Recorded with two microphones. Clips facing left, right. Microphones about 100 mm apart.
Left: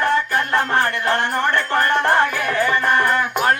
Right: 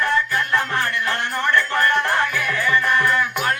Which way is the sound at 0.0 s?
35° left (ahead or behind).